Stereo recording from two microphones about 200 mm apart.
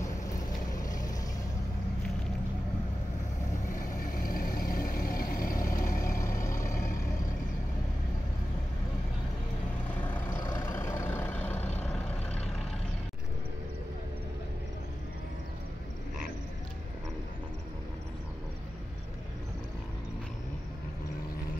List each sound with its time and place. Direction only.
0.7 s vehicle: 20° left (ahead or behind)
3.7 s vehicle: 45° left (ahead or behind)
10.1 s vehicle: 15° left (ahead or behind)